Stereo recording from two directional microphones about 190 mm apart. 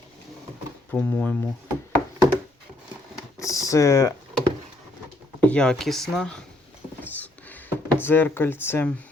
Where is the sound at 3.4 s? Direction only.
15° left (ahead or behind).